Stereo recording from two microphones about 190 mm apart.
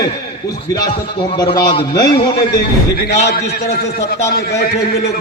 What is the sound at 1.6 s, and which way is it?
Speech, 20° left (ahead or behind).